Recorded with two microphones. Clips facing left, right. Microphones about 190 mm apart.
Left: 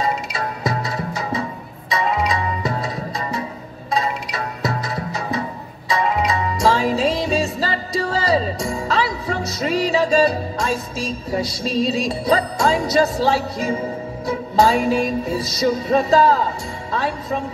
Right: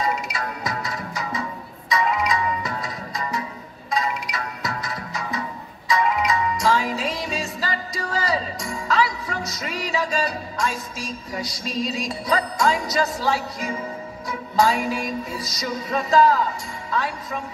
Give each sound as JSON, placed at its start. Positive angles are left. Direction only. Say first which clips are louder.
{"t": 0.0, "sound": "music", "louder": "left 3 dB", "side_deg": 30}